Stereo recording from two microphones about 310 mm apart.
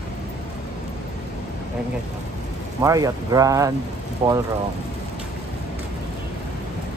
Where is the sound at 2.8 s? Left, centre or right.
Centre.